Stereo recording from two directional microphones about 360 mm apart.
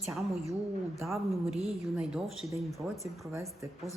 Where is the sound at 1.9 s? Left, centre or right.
Centre.